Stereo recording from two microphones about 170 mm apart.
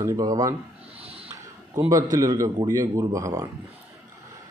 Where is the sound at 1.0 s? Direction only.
35° right (ahead or behind).